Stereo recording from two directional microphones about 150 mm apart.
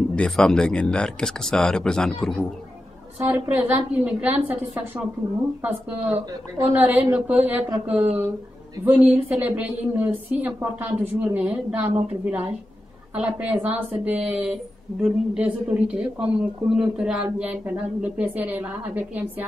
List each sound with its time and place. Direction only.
0.1 s speech: 5° left (ahead or behind)
3.3 s a woman's voice: 10° right (ahead or behind)
6.1 s a woman's voice: 45° right (ahead or behind)
7.1 s a woman's voice: 10° right (ahead or behind)